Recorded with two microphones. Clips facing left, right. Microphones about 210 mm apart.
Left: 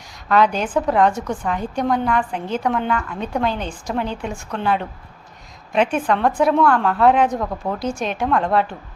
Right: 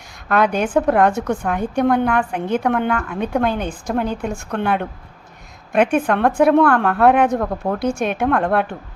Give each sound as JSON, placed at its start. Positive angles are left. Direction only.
{"t": 0.3, "sound": "a woman's voice", "side_deg": -55}
{"t": 7.8, "sound": "a woman's voice", "side_deg": -60}